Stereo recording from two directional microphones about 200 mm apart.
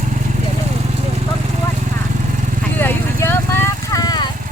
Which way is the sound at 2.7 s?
10° left (ahead or behind).